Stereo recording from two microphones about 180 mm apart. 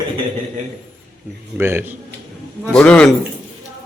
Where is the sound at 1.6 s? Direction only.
10° right (ahead or behind).